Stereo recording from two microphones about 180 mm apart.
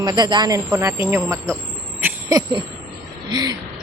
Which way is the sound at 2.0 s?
20° right (ahead or behind).